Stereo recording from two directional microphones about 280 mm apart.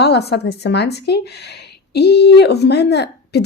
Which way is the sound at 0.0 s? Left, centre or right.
Left.